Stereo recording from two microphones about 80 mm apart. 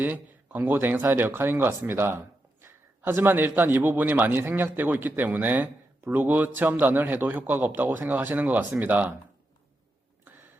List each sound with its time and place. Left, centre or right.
0.0 s a man's voice: right